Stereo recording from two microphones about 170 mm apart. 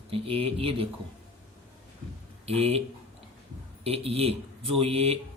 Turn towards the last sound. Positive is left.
turn(degrees=-35)  # may be behind; listen again after turning